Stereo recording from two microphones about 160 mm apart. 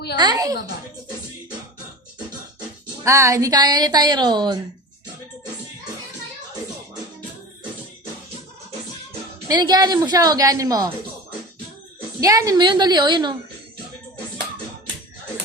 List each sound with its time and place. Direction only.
0.2 s a woman's voice: 25° right (ahead or behind)
3.0 s a woman's voice: 20° right (ahead or behind)
9.5 s a woman's voice: 25° right (ahead or behind)
12.2 s a woman's voice: 20° right (ahead or behind)